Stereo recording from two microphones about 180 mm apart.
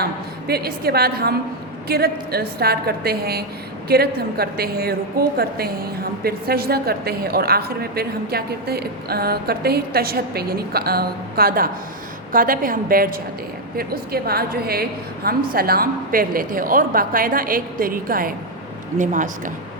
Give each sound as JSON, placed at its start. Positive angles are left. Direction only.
{"t": 0.0, "sound": "a woman's voice", "side_deg": -60}